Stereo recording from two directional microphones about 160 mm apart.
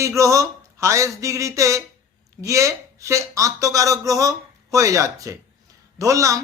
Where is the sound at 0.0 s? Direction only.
20° right (ahead or behind).